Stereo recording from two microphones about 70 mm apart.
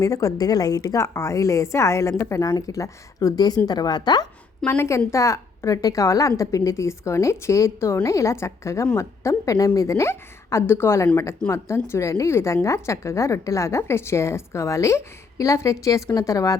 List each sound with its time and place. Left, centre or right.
0.0 s a woman's voice: left
3.7 s a woman's voice: left
4.8 s a woman's voice: left